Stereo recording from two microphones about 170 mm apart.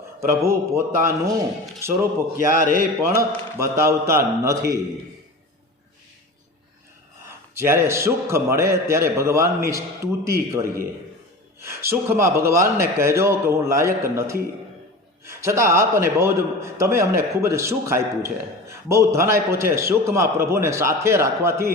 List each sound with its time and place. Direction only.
0.2 s a man's voice: 15° right (ahead or behind)
3.0 s a man's voice: 15° right (ahead or behind)
7.6 s a man's voice: 15° right (ahead or behind)